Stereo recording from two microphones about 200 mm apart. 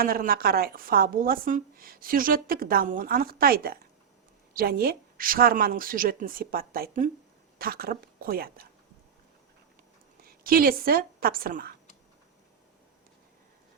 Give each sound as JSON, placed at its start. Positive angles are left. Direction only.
{"t": 0.0, "sound": "speech", "side_deg": -45}
{"t": 10.2, "sound": "a woman's voice", "side_deg": -45}